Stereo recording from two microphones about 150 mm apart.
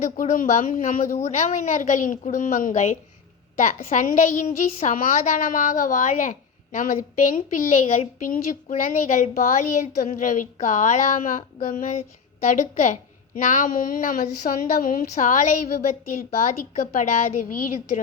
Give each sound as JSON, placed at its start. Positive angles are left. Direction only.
{"t": 0.0, "sound": "a woman's voice", "side_deg": 60}